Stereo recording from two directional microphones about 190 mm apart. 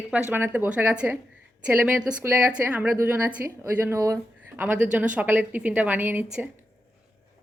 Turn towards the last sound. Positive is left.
turn(degrees=-10)  # may be behind; listen again after turning